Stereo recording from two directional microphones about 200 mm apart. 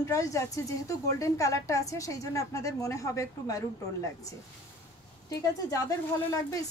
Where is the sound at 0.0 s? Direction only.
15° left (ahead or behind).